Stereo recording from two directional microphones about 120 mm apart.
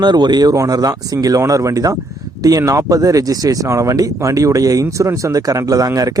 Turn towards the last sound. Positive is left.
turn(degrees=-30)  # may be behind; listen again after turning